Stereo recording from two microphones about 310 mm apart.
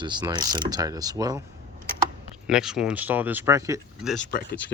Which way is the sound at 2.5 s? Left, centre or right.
Centre.